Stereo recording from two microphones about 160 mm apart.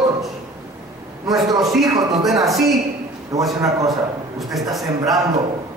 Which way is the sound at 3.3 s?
20° right (ahead or behind).